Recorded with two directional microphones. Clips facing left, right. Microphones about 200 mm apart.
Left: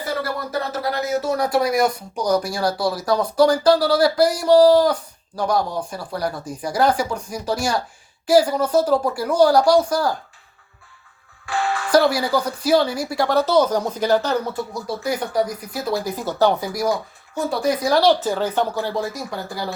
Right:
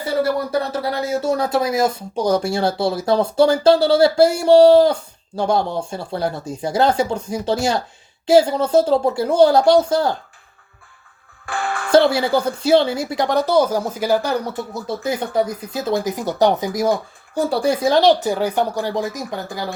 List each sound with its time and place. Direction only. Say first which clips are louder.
0.7 s speech: right 1 dB; 30° right (ahead or behind)
11.4 s music: left 1 dB; 55° right (ahead or behind)
11.9 s speech: right 3 dB; 25° right (ahead or behind)
14.7 s speech: right 1 dB; 25° right (ahead or behind)
17.3 s speech: right 3 dB; 30° right (ahead or behind)